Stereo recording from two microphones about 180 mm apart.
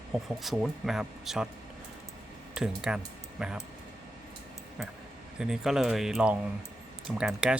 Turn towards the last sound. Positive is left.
turn(degrees=-5)  # may be behind; listen again after turning